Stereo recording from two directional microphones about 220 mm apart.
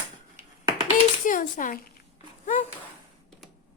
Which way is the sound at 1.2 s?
35° left (ahead or behind).